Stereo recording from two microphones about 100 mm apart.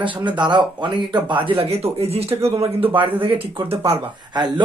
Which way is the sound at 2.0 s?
90° right.